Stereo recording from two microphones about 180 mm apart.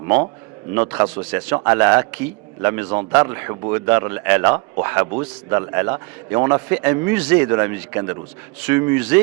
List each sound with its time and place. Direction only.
0.7 s a man's voice: 10° right (ahead or behind)
2.9 s speech: 30° right (ahead or behind)
3.2 s a man's voice: 15° right (ahead or behind)